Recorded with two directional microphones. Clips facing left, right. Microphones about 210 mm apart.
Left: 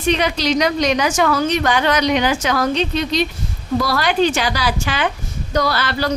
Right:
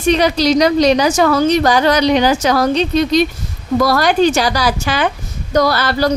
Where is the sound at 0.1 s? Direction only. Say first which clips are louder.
Right 5 dB; 35° right (ahead or behind).